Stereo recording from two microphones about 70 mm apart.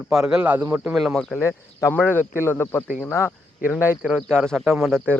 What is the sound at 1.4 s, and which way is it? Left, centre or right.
Speech, left.